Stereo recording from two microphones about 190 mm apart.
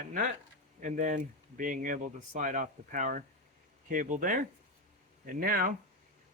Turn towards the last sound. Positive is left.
turn(degrees=-50)  # may be behind; listen again after turning